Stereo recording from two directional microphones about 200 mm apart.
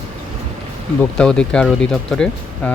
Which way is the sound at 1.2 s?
5° left (ahead or behind).